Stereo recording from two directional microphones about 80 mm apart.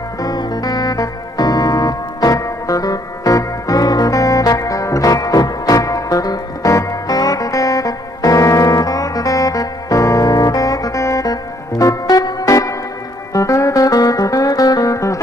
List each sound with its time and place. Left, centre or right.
0.2 s music: left